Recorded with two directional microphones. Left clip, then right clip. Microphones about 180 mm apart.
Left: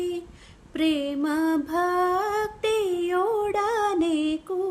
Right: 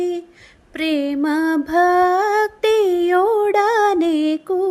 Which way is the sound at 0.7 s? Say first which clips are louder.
Right 5 dB; 30° right (ahead or behind).